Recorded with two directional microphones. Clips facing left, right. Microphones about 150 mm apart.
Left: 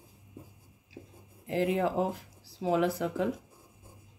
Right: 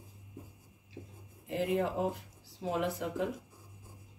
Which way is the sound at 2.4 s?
90° left.